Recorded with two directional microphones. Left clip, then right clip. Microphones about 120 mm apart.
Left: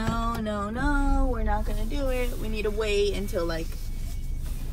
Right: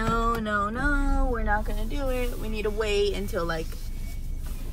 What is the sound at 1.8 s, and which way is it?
A woman's voice, 25° right (ahead or behind).